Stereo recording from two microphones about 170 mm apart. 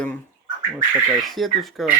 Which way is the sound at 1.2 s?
Centre (ahead or behind).